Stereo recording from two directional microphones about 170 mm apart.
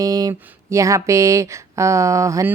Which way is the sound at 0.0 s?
20° right (ahead or behind).